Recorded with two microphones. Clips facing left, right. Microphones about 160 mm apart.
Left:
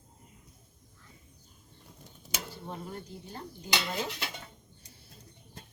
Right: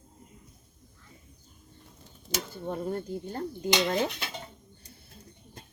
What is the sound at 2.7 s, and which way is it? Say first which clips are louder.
Speech: right 12 dB; 45° right (ahead or behind).